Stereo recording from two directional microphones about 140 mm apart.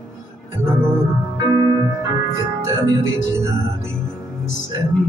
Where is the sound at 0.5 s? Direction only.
15° right (ahead or behind).